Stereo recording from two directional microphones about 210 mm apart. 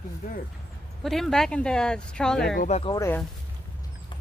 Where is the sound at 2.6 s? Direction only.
30° left (ahead or behind).